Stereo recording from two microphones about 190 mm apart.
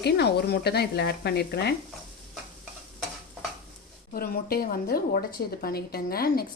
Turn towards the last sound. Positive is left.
turn(degrees=50)  # may be behind; listen again after turning